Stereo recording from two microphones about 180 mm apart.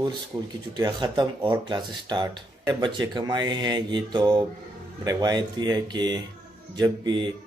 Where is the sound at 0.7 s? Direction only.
20° right (ahead or behind).